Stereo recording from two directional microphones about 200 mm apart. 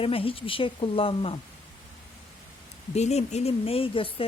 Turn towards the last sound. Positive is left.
turn(degrees=25)  # may be behind; listen again after turning